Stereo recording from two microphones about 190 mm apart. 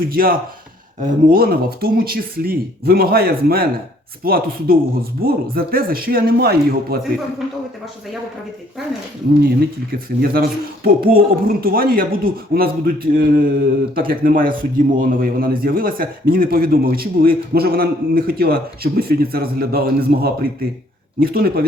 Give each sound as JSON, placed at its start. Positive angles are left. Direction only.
{"t": 0.1, "sound": "speech", "side_deg": -50}
{"t": 9.4, "sound": "speech", "side_deg": -55}